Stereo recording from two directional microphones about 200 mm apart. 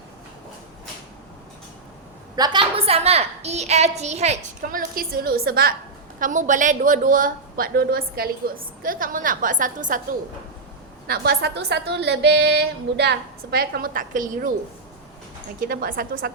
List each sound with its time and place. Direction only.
2.3 s a woman's voice: 20° right (ahead or behind); by 10.0 s 40° right (ahead or behind)
11.0 s a woman's voice: 50° right (ahead or behind)
15.6 s a woman's voice: 45° right (ahead or behind)